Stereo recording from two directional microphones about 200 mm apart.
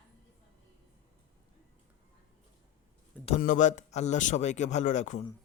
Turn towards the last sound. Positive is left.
turn(degrees=35)  # may be behind; listen again after turning